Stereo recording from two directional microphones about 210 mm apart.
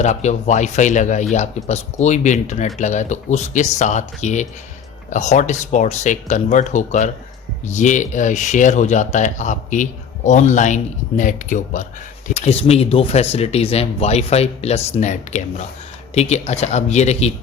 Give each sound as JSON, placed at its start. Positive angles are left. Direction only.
{"t": 0.0, "sound": "speech", "side_deg": 35}